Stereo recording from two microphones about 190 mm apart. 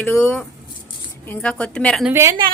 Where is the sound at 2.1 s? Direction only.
15° right (ahead or behind).